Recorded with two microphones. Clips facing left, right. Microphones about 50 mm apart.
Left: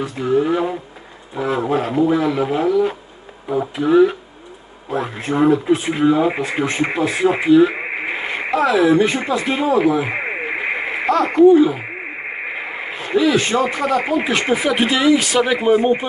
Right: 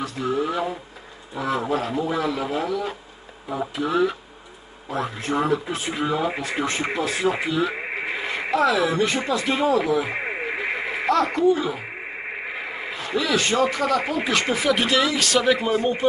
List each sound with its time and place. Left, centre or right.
0.0 s speech: left
1.7 s speech: left
5.9 s speech: left
7.6 s radio: left
12.9 s speech: left